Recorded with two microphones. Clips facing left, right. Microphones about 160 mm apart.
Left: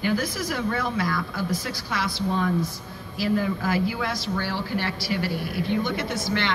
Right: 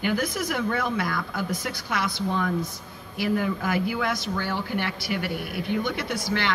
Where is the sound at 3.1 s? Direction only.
60° right (ahead or behind).